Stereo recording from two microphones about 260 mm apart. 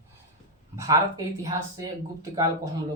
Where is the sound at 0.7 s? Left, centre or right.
Centre.